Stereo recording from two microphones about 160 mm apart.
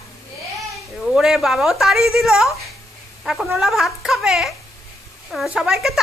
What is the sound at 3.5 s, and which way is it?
Speech, centre (ahead or behind).